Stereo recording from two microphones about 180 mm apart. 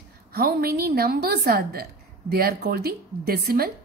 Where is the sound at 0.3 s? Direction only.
60° right (ahead or behind).